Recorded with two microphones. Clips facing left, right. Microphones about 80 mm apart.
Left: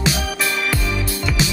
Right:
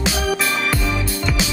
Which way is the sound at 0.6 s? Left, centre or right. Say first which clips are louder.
Right 1 dB; centre.